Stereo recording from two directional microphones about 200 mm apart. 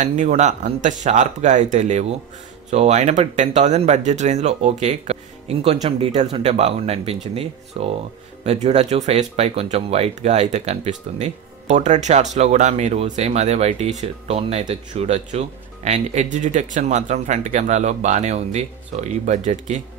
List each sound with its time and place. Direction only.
0.0 s speech: 35° right (ahead or behind)